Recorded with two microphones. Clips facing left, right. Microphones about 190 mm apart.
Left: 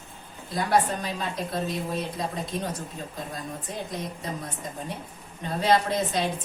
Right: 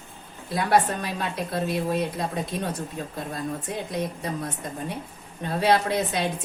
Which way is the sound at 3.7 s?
65° right (ahead or behind).